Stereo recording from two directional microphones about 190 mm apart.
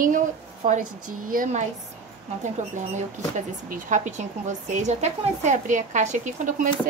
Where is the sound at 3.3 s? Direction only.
45° right (ahead or behind).